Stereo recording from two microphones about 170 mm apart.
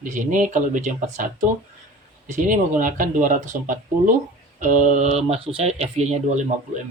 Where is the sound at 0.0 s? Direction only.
50° right (ahead or behind).